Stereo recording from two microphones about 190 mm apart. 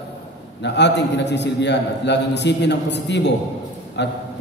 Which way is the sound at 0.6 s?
65° left (ahead or behind).